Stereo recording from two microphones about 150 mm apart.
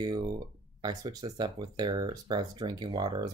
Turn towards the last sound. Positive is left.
turn(degrees=-30)  # may be behind; listen again after turning